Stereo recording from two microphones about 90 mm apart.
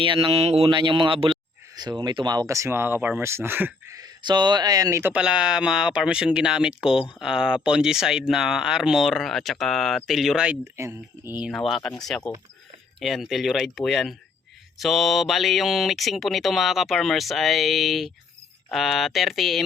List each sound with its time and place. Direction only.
0.0 s speech: 75° right (ahead or behind)
1.7 s speech: 50° right (ahead or behind)
2.6 s speech: 25° right (ahead or behind)
4.2 s speech: 55° right (ahead or behind); by 5.1 s 35° right (ahead or behind)
5.1 s speech: 10° right (ahead or behind)
10.6 s speech: 35° right (ahead or behind)
11.5 s speech: 5° left (ahead or behind)